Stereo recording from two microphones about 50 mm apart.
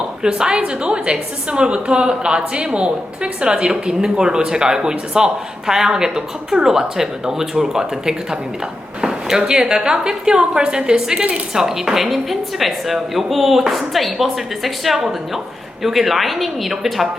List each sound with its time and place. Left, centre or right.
0.2 s a woman's voice: centre
9.0 s a sound: centre
9.4 s a woman's voice: centre